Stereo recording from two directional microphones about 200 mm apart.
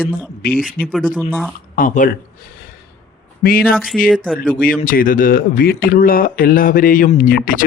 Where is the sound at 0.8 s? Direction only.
Centre (ahead or behind).